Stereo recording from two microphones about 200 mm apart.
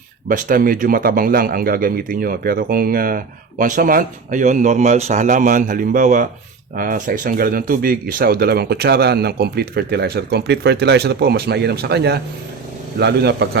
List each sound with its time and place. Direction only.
0.3 s speech: 45° right (ahead or behind)